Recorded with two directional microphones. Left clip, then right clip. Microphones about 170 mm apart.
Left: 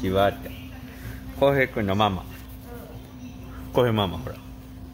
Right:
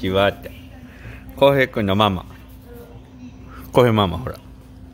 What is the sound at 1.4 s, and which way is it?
Speech, 40° right (ahead or behind).